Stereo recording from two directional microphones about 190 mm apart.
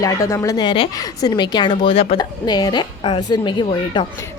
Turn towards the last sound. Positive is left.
turn(degrees=25)  # may be behind; listen again after turning